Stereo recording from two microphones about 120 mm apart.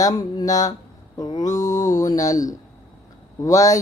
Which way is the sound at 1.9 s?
30° left (ahead or behind).